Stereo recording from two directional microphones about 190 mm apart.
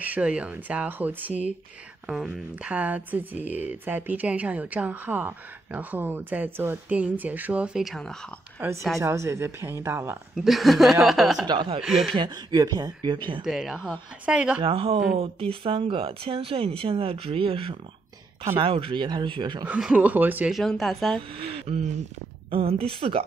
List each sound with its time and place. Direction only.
0.0 s speech: 5° right (ahead or behind)
9.0 s speech: 15° right (ahead or behind)
10.3 s speech: centre (ahead or behind)
11.4 s speech: 25° right (ahead or behind)
11.8 s speech: centre (ahead or behind)
12.2 s speech: 20° right (ahead or behind)
13.4 s speech: centre (ahead or behind)
14.6 s speech: 30° right (ahead or behind)
19.7 s speech: 5° right (ahead or behind)
21.4 s speech: 30° right (ahead or behind)